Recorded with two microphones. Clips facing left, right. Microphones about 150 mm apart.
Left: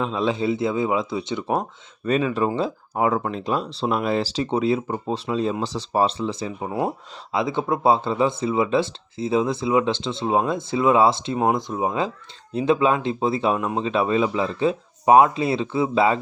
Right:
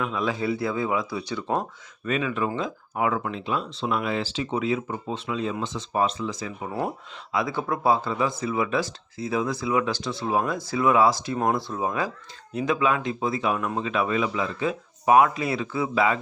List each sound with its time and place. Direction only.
0.0 s speech: 25° left (ahead or behind)
2.0 s speech: 35° left (ahead or behind)